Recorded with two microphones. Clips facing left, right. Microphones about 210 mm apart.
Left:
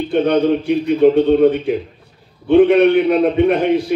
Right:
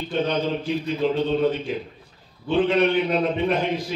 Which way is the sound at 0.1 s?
65° left (ahead or behind).